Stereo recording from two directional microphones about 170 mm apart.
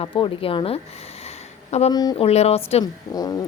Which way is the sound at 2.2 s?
35° left (ahead or behind).